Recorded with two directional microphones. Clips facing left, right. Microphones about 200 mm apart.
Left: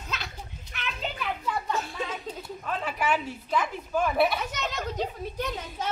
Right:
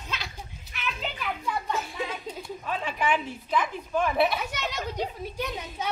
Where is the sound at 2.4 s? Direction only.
5° left (ahead or behind).